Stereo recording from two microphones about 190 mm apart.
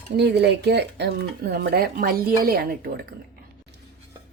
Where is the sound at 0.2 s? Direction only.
65° right (ahead or behind).